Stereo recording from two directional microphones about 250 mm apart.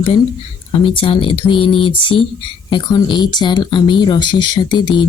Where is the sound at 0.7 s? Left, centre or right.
Left.